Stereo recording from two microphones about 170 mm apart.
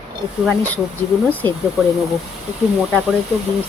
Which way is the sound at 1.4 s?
25° right (ahead or behind).